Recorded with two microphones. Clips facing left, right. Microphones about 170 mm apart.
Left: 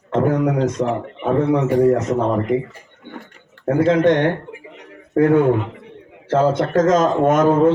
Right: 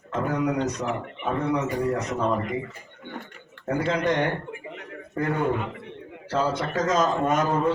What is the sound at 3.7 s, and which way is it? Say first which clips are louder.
A man's voice: left 10 dB; 50° left (ahead or behind).